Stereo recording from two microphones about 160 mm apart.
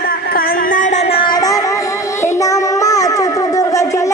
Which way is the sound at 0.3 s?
55° left (ahead or behind).